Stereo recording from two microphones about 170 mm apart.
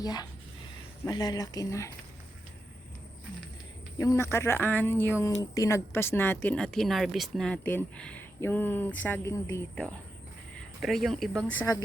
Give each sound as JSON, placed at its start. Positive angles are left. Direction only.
{"t": 0.0, "sound": "speech", "side_deg": 25}
{"t": 3.9, "sound": "a woman's voice", "side_deg": 20}